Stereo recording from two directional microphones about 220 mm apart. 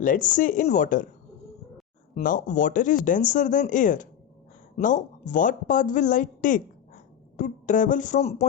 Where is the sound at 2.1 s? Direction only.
35° left (ahead or behind).